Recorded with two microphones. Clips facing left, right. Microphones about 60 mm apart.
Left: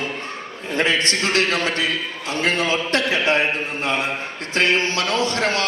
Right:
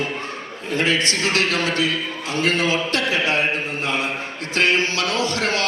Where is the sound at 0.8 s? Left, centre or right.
Left.